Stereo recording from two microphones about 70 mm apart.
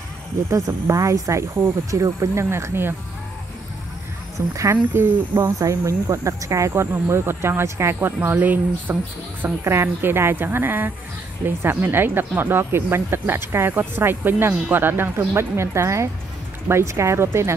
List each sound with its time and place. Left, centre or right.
0.5 s speech: right
4.4 s speech: right
5.6 s speech: right
6.7 s speech: right